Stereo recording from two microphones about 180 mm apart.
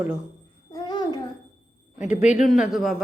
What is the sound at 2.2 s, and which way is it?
Speech, 40° left (ahead or behind).